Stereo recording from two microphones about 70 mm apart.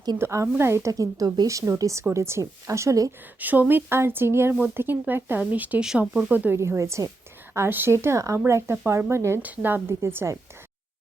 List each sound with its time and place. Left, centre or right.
0.2 s speech: right
3.4 s speech: right
6.6 s speech: right
7.5 s speech: right
9.4 s speech: right